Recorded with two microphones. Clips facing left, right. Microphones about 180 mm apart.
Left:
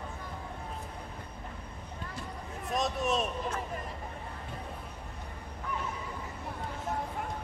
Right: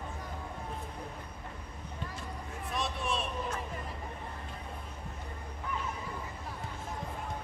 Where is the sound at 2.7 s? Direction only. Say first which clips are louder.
Left 5 dB; 45° left (ahead or behind).